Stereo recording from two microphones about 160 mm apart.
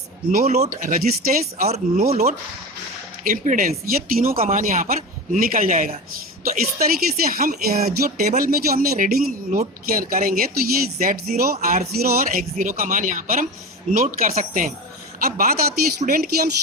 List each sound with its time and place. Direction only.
0.3 s speech: 65° right (ahead or behind)
0.5 s speech: 45° right (ahead or behind)
1.6 s speech: 40° right (ahead or behind)
3.2 s a woman's voice: 55° right (ahead or behind)
15.2 s a woman's voice: 65° right (ahead or behind)